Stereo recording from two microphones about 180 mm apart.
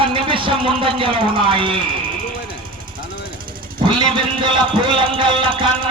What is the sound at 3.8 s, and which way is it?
Speech, 25° right (ahead or behind).